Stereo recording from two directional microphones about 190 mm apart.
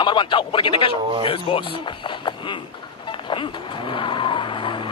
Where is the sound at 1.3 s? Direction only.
25° left (ahead or behind).